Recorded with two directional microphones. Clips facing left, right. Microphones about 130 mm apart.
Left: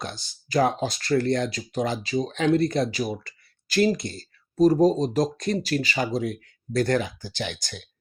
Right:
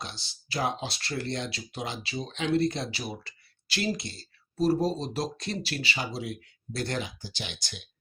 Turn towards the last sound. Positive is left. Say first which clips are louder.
# left 8 dB
turn(degrees=50)  # may be behind; listen again after turning